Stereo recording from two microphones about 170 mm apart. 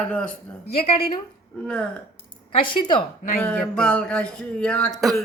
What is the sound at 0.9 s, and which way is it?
Speech, 35° left (ahead or behind).